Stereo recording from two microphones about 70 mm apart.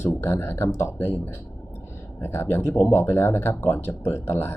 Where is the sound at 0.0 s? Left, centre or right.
Left.